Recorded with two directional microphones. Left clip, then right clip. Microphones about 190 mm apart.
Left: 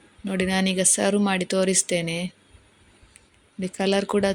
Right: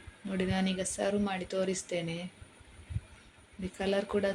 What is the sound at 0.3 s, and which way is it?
Speech, 60° left (ahead or behind).